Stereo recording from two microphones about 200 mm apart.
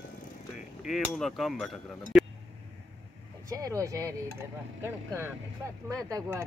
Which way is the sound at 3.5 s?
15° right (ahead or behind).